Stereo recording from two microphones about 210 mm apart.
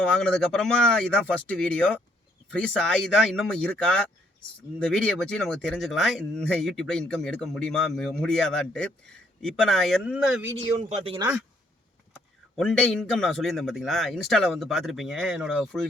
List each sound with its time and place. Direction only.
0.2 s speech: 5° left (ahead or behind)
10.8 s speech: 30° right (ahead or behind)
12.5 s speech: centre (ahead or behind)